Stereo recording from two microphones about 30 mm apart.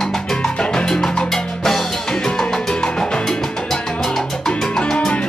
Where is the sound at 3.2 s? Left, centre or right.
Centre.